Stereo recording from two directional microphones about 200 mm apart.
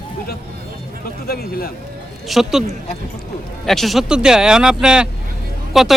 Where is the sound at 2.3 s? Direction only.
Centre (ahead or behind).